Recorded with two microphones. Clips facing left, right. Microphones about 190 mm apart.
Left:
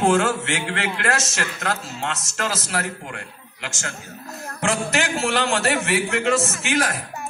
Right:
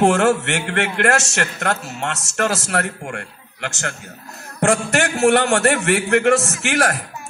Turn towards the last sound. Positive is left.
turn(degrees=-65)  # may be behind; listen again after turning